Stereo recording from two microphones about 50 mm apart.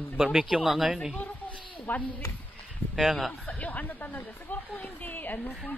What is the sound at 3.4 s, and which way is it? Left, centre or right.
A woman's voice, left.